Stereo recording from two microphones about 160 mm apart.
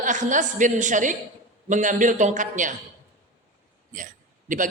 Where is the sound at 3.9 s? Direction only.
55° right (ahead or behind).